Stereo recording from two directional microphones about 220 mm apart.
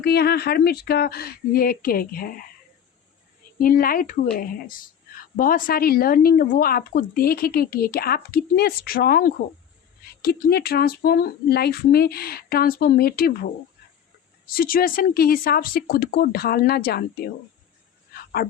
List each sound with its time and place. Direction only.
0.0 s speech: 45° left (ahead or behind)
3.6 s speech: 40° left (ahead or behind)
18.1 s dog: 40° left (ahead or behind)